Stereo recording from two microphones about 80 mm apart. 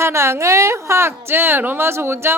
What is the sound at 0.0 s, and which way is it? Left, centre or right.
Speech, right.